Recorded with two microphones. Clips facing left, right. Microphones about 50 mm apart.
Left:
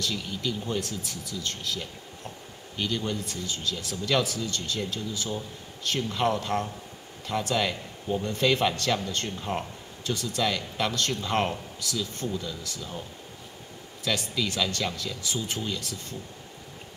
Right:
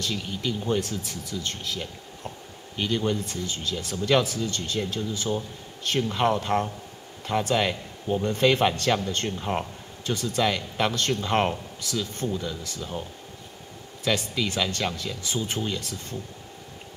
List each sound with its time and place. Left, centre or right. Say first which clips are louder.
0.0 s speech: right 1 dB; right
14.0 s speech: right 3 dB; right